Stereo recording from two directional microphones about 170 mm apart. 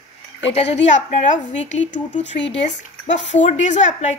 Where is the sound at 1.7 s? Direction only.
90° left.